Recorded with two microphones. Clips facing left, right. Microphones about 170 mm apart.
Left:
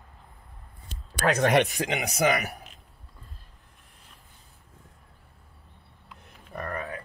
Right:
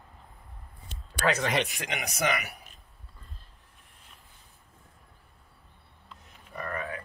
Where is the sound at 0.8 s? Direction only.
40° left (ahead or behind).